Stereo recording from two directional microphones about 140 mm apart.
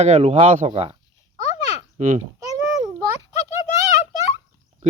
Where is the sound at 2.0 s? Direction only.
60° right (ahead or behind).